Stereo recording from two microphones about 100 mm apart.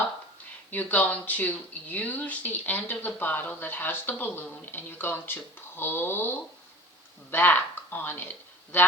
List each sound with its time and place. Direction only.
0.7 s speech: 20° left (ahead or behind)